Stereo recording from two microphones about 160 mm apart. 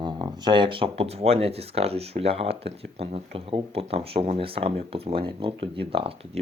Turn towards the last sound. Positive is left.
turn(degrees=-35)  # may be behind; listen again after turning